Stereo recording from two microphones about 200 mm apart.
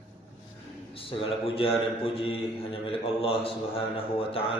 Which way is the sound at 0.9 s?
30° left (ahead or behind).